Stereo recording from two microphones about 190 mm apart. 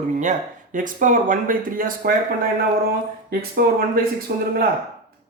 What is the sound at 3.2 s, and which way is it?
Speech, 50° right (ahead or behind).